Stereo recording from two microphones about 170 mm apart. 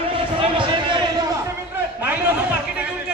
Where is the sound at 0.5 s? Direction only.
30° right (ahead or behind).